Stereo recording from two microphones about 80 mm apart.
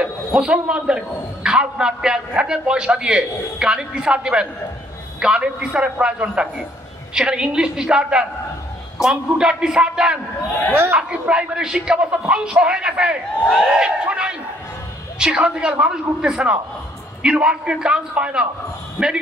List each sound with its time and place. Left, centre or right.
0.0 s a man's voice: centre
10.7 s speech: right
11.0 s a man's voice: centre
13.4 s speech: centre
13.7 s a man's voice: centre